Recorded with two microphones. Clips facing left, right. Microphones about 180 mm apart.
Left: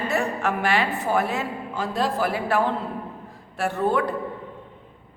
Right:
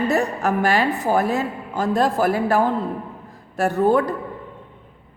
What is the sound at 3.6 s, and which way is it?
Speech, 40° right (ahead or behind).